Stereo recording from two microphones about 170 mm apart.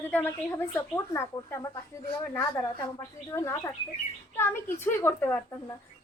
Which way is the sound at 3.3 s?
15° left (ahead or behind).